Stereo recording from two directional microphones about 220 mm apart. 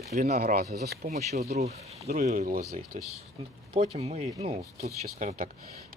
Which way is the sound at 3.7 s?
30° right (ahead or behind).